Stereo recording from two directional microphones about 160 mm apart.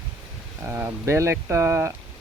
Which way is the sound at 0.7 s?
15° right (ahead or behind).